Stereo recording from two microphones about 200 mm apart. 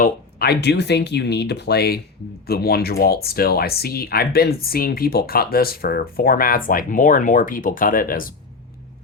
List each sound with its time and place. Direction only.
0.0 s speech: 50° left (ahead or behind)